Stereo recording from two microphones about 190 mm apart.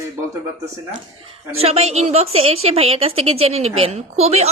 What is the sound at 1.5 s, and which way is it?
A woman's voice, 30° right (ahead or behind).